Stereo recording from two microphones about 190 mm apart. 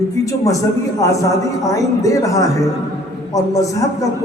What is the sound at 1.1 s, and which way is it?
A man's voice, 15° left (ahead or behind).